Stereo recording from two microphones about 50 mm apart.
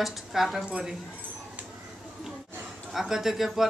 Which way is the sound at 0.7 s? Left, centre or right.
Centre.